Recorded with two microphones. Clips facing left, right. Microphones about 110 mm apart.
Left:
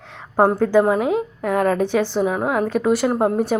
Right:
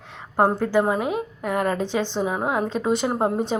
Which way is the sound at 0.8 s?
5° right (ahead or behind).